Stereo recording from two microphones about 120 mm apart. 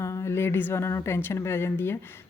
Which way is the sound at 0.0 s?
25° left (ahead or behind).